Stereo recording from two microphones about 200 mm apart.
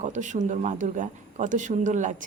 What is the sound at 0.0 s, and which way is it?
Speech, 40° right (ahead or behind).